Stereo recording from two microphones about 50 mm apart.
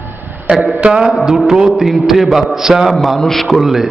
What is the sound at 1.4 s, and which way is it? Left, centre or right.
A man's voice, centre.